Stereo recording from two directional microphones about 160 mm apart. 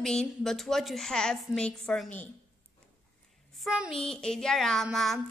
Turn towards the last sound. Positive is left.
turn(degrees=0)  # may be behind; listen again after turning